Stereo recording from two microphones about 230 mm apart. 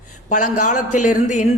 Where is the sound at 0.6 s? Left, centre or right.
Left.